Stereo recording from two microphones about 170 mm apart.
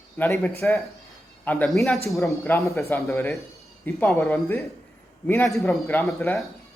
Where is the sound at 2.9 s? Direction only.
10° left (ahead or behind).